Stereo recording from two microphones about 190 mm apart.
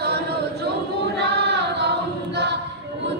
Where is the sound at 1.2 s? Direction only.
60° right (ahead or behind).